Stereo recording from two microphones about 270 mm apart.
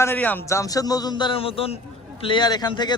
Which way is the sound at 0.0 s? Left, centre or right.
Centre.